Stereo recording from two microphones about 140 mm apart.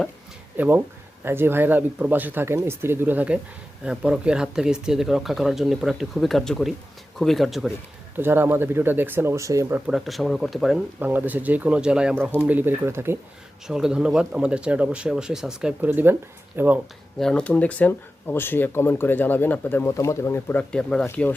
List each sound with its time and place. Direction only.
0.5 s speech: 15° right (ahead or behind)
8.1 s speech: 15° right (ahead or behind)
9.9 s speech: centre (ahead or behind)
11.0 s speech: 15° right (ahead or behind)
13.7 s speech: 5° right (ahead or behind)
17.2 s speech: 5° left (ahead or behind)